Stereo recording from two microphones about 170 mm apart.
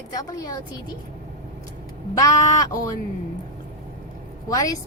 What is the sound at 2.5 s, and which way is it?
Speech, 20° left (ahead or behind).